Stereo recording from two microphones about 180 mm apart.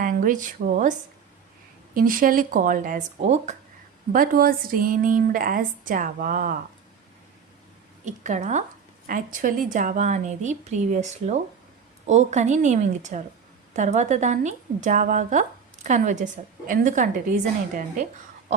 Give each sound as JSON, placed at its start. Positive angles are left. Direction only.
{"t": 0.0, "sound": "speech", "side_deg": -50}
{"t": 4.1, "sound": "speech", "side_deg": -55}
{"t": 8.0, "sound": "a woman's voice", "side_deg": -45}